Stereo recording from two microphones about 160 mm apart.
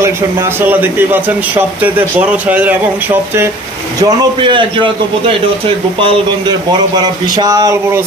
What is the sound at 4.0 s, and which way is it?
A man's voice, 25° right (ahead or behind).